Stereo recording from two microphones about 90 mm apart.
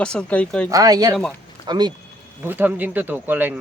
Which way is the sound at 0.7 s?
45° right (ahead or behind).